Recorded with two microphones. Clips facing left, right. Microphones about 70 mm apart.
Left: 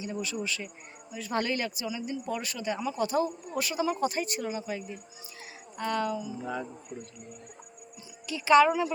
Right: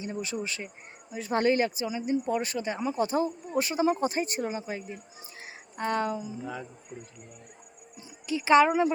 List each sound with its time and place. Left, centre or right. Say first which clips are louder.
0.0 s speech: even; right
5.4 s music: right 2 dB; right
6.4 s speech: left 3 dB; centre
8.3 s speech: even; right